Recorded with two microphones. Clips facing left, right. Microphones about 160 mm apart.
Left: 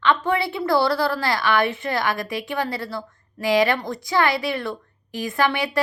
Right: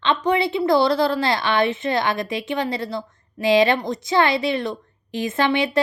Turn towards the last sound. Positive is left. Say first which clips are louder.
# right 2 dB
turn(degrees=-20)  # may be behind; listen again after turning